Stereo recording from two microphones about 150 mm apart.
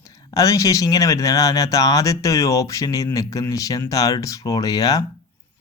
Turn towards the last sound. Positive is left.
turn(degrees=25)  # may be behind; listen again after turning